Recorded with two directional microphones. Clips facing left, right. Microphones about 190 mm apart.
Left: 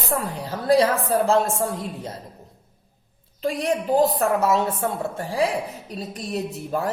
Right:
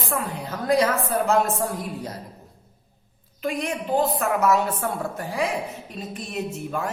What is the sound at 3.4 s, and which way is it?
A woman's voice, 35° left (ahead or behind).